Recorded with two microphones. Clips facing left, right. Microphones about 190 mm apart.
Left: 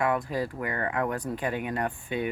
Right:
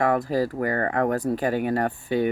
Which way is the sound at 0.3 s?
40° right (ahead or behind).